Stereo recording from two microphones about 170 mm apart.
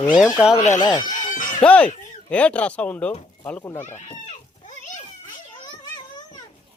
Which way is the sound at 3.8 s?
40° left (ahead or behind).